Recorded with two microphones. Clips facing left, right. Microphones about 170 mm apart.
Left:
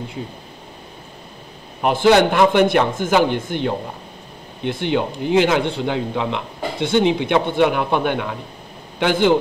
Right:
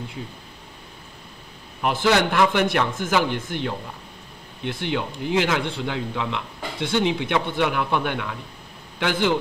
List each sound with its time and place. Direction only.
1.8 s a man's voice: 25° left (ahead or behind)